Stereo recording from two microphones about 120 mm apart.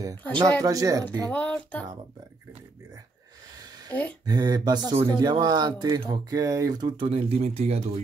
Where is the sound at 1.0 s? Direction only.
10° left (ahead or behind).